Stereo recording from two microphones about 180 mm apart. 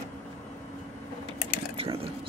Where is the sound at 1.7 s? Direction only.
30° right (ahead or behind).